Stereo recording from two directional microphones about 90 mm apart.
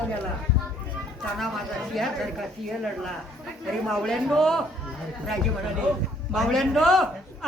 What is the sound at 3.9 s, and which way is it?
Speech, 5° left (ahead or behind).